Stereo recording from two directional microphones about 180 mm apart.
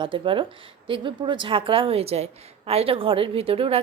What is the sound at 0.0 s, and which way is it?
Speech, 30° right (ahead or behind).